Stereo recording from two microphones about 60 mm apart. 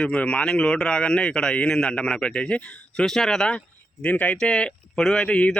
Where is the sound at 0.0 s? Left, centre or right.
Centre.